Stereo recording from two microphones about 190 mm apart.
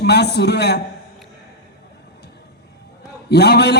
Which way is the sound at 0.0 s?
60° left (ahead or behind).